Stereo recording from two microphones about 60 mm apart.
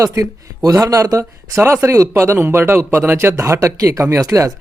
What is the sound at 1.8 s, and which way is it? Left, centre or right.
Speech, right.